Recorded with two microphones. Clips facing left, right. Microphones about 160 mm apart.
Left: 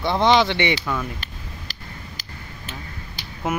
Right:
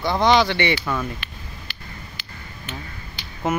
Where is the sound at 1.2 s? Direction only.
40° left (ahead or behind).